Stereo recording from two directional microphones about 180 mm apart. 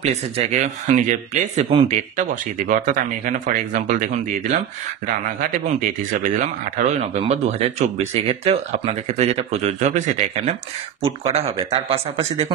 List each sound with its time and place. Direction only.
0.0 s speech: 40° right (ahead or behind)